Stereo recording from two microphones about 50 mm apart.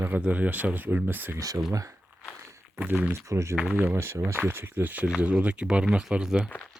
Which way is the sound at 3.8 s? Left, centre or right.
Right.